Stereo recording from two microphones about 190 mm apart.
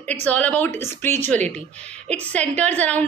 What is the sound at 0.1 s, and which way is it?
A woman's voice, 5° left (ahead or behind).